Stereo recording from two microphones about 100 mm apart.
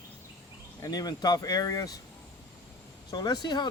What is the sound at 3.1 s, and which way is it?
Speech, 40° left (ahead or behind).